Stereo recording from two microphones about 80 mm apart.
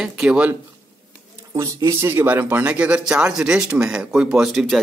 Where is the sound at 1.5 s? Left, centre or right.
Right; by 4.8 s centre.